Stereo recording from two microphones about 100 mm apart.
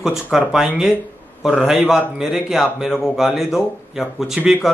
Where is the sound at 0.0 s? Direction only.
5° right (ahead or behind).